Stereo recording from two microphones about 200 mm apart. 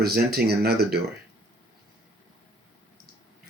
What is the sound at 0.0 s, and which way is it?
Speech, 50° right (ahead or behind).